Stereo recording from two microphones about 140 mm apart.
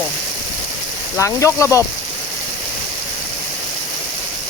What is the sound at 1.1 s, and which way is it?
Speech, 20° left (ahead or behind).